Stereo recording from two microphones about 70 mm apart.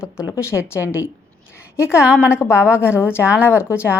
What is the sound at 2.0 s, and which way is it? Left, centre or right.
Speech, centre.